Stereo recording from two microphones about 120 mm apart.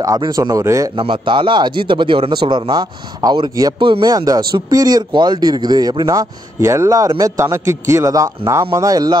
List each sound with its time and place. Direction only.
0.4 s speech: 25° right (ahead or behind)
0.9 s speech: 45° right (ahead or behind)